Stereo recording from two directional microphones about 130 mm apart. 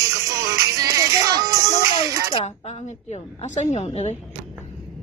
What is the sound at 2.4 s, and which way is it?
A woman's voice, 50° left (ahead or behind).